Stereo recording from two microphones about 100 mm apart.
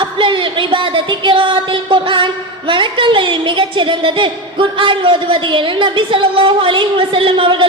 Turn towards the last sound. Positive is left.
turn(degrees=-60)  # may be behind; listen again after turning